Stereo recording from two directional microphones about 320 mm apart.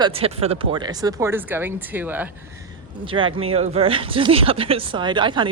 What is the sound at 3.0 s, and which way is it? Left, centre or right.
Speech, centre.